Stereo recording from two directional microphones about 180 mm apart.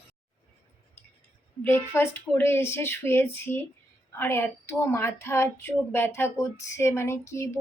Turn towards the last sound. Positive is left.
turn(degrees=15)  # may be behind; listen again after turning